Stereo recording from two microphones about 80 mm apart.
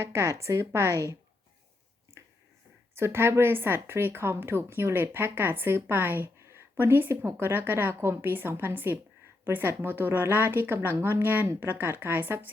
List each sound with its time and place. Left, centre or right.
0.0 s a woman's voice: right
2.9 s a woman's voice: right